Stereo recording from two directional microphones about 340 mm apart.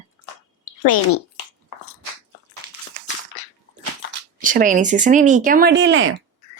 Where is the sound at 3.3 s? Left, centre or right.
Left.